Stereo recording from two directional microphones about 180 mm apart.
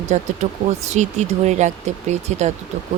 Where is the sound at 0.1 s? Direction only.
40° right (ahead or behind).